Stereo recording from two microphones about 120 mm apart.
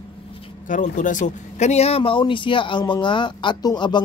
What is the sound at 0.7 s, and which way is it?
A man's voice, 90° left.